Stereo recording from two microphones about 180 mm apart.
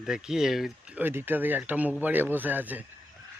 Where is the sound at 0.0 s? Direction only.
5° right (ahead or behind).